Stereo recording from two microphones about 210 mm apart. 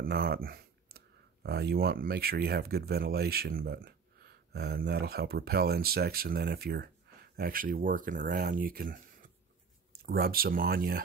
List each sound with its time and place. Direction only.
0.0 s speech: 45° right (ahead or behind)